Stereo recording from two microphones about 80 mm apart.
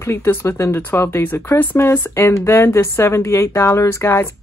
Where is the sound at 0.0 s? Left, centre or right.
Left.